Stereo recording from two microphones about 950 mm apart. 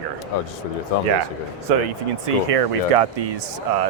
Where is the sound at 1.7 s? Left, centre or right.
Right.